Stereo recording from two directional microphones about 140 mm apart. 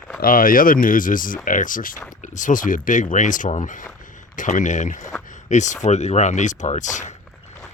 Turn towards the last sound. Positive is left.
turn(degrees=60)  # may be behind; listen again after turning